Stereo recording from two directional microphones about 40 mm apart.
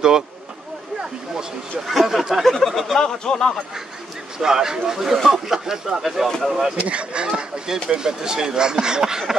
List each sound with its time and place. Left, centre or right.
1.9 s speech: centre
2.3 s speech: centre
3.0 s speech: centre
4.4 s speech: centre
6.8 s speech: right